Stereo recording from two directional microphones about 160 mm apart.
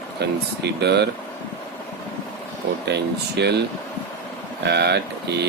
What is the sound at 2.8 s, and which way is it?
Speech, 90° right.